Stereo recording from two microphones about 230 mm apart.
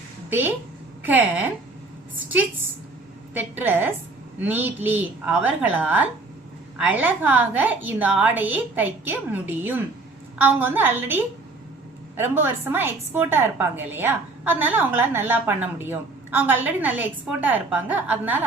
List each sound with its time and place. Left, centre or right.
0.3 s a woman's voice: centre
3.3 s a woman's voice: centre